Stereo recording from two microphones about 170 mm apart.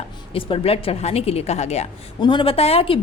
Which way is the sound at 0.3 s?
30° left (ahead or behind).